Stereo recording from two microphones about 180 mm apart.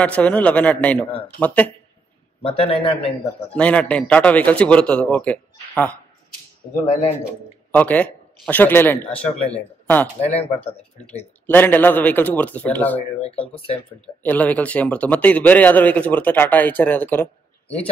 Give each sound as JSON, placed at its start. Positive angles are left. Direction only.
{"t": 0.0, "sound": "speech", "side_deg": 5}
{"t": 2.4, "sound": "speech", "side_deg": 30}
{"t": 3.5, "sound": "speech", "side_deg": 5}
{"t": 7.7, "sound": "speech", "side_deg": 10}
{"t": 11.4, "sound": "speech", "side_deg": 10}
{"t": 13.2, "sound": "speech", "side_deg": 30}
{"t": 14.2, "sound": "speech", "side_deg": 10}